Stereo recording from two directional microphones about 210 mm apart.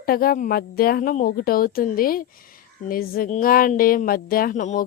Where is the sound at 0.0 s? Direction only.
45° left (ahead or behind).